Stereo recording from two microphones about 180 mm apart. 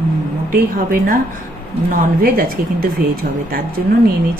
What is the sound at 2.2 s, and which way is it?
A woman's voice, 55° right (ahead or behind).